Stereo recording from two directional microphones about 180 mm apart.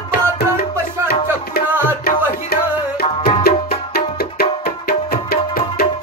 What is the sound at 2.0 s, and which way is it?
Music, 60° left (ahead or behind).